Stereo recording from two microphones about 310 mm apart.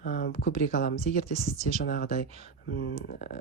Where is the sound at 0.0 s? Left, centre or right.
Left.